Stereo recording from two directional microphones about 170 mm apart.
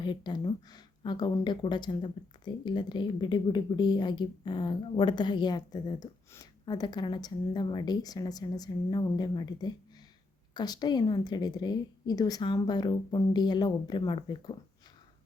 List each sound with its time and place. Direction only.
0.0 s speech: 25° left (ahead or behind)